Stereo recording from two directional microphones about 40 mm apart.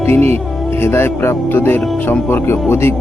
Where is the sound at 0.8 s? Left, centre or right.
Left.